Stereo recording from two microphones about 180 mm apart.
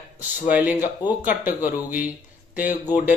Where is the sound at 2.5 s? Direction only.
10° right (ahead or behind).